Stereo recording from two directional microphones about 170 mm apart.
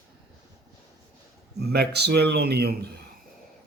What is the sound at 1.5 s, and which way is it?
Speech, 70° right (ahead or behind).